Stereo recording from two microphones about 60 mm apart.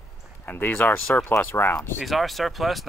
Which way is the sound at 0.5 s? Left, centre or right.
Left.